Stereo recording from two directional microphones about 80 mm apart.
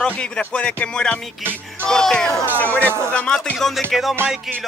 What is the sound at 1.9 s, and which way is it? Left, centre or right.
Music, centre.